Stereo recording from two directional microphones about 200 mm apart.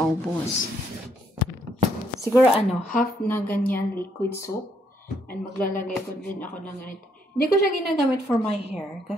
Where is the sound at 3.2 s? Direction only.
10° left (ahead or behind).